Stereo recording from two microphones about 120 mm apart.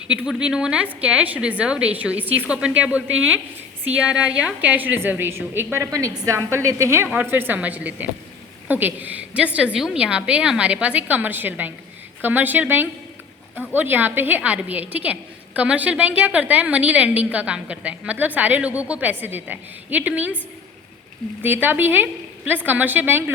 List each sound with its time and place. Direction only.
0.1 s a woman's voice: 5° right (ahead or behind)
21.4 s a woman's voice: 15° right (ahead or behind)